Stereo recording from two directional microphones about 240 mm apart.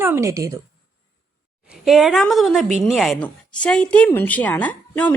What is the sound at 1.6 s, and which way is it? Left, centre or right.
A woman's voice, centre.